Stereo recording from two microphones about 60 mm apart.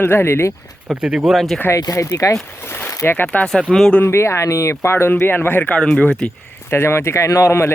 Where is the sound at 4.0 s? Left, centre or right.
Left.